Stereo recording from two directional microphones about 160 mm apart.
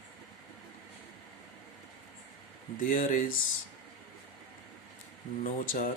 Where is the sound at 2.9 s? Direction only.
55° left (ahead or behind).